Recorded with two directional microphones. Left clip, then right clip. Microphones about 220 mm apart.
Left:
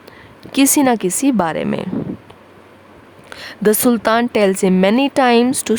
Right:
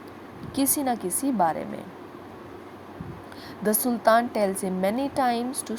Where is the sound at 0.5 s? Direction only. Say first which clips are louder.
Left 12 dB; 60° left (ahead or behind).